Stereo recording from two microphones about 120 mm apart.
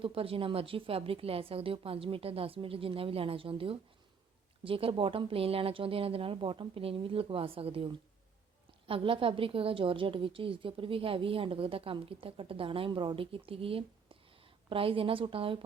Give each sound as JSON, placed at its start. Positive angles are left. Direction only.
{"t": 0.0, "sound": "a woman's voice", "side_deg": -50}
{"t": 8.9, "sound": "a woman's voice", "side_deg": -50}